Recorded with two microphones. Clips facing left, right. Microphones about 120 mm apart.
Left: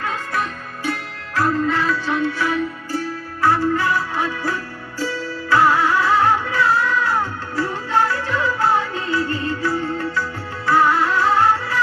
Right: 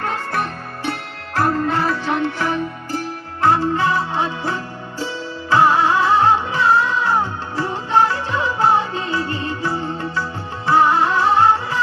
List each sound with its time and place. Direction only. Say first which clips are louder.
0.0 s music: right 2 dB; 60° right (ahead or behind)
1.4 s music: right 1 dB; 55° right (ahead or behind)
3.4 s music: right 1 dB; 20° right (ahead or behind)